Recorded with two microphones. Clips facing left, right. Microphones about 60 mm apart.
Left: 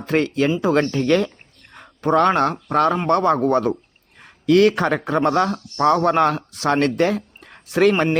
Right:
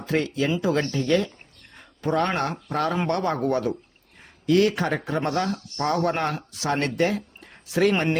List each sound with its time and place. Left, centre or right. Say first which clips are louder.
0.0 s speech: left 5 dB; left
0.9 s speech: left 4 dB; left
4.2 s speech: left 5 dB; left